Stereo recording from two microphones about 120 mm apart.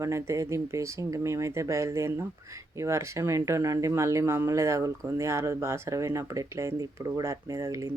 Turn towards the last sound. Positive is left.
turn(degrees=-25)  # may be behind; listen again after turning